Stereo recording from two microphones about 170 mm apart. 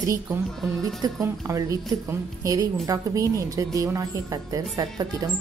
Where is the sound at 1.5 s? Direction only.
20° right (ahead or behind).